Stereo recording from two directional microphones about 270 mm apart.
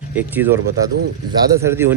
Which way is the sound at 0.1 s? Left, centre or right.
Centre.